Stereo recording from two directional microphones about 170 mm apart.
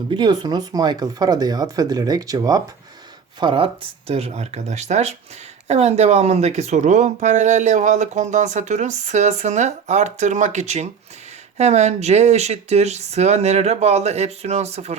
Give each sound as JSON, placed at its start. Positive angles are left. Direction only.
{"t": 0.1, "sound": "speech", "side_deg": -25}